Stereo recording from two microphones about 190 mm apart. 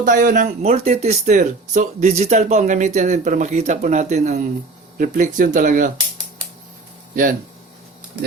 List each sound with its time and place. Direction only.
0.0 s speech: 45° right (ahead or behind)